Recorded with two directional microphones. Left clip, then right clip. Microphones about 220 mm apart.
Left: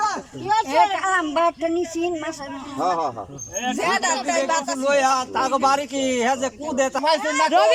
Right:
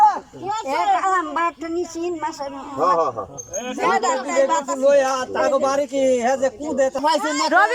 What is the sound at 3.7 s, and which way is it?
Speech, 50° left (ahead or behind).